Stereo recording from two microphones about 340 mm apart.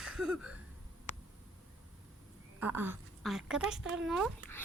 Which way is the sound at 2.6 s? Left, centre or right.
Centre.